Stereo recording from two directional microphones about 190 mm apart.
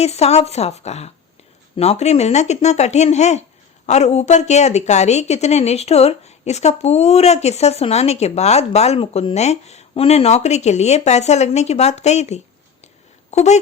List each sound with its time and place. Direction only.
0.0 s a woman's voice: 35° left (ahead or behind)